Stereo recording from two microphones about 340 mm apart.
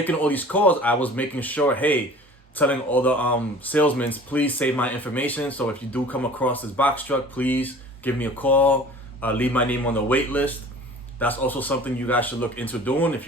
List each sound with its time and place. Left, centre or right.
0.0 s speech: centre